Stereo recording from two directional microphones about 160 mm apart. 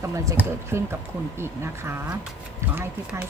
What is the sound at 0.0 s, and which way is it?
Speech, 20° right (ahead or behind).